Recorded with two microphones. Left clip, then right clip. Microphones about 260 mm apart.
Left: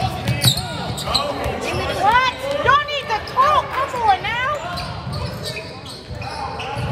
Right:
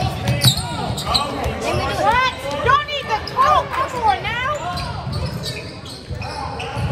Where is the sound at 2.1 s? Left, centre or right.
Left.